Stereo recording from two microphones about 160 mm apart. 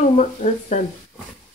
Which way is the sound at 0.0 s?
50° left (ahead or behind).